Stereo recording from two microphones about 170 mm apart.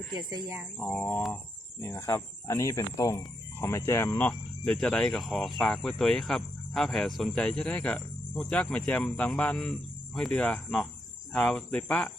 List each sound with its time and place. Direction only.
0.1 s speech: 25° right (ahead or behind)
0.8 s speech: 10° left (ahead or behind)